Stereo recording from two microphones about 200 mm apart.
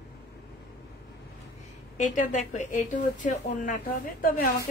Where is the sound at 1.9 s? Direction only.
40° left (ahead or behind).